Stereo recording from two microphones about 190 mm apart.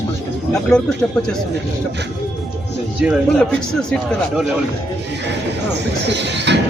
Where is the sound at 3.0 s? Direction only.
5° left (ahead or behind).